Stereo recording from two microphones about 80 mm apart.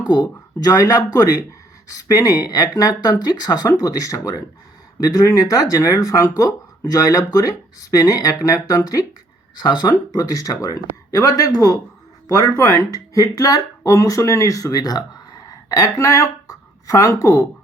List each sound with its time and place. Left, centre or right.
0.0 s speech: left
9.6 s speech: left